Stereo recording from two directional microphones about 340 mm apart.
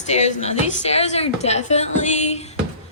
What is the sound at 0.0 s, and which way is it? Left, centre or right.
A woman's voice, centre.